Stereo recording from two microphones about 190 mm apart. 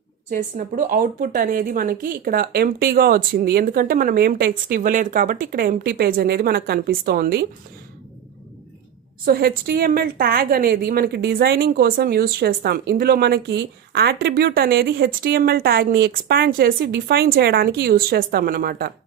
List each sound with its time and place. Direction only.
0.3 s a woman's voice: 45° right (ahead or behind)
9.2 s a woman's voice: 50° right (ahead or behind)